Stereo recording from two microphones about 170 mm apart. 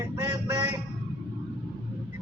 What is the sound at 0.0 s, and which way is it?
Quack, 15° right (ahead or behind).